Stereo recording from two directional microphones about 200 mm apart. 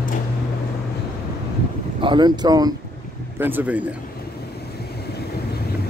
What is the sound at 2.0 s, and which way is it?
Speech, 20° right (ahead or behind).